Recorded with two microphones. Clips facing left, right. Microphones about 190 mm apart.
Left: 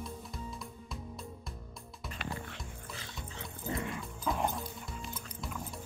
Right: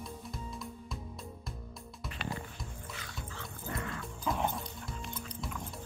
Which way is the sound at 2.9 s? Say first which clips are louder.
Even; 25° left (ahead or behind).